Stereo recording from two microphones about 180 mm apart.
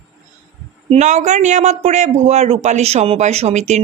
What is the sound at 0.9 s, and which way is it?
A man's voice, 40° right (ahead or behind).